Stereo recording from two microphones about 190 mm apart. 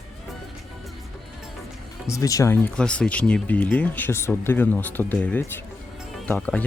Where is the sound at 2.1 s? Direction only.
15° left (ahead or behind).